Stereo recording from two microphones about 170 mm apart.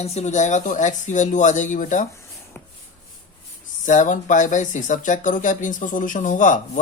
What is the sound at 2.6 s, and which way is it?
Rub, 15° left (ahead or behind).